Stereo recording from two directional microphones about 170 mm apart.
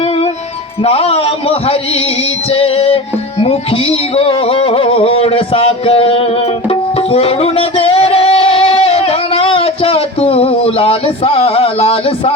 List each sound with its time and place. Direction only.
0.9 s music: 35° left (ahead or behind)